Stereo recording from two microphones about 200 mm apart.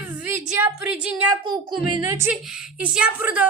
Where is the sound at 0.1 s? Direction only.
10° right (ahead or behind).